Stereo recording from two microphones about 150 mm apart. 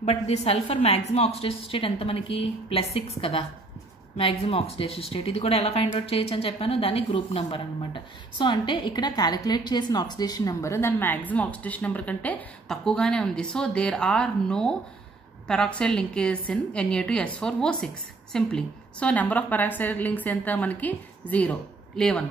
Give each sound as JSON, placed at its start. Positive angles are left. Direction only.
{"t": 0.0, "sound": "a woman's voice", "side_deg": 45}